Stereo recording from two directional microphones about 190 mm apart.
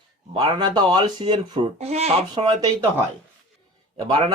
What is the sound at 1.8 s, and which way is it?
Speech, 35° right (ahead or behind).